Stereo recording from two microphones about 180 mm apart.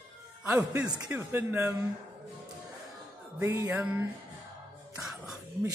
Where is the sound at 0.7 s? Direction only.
20° right (ahead or behind).